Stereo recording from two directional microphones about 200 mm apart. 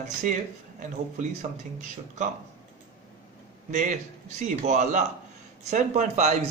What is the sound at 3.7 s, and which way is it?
Speech, 35° right (ahead or behind).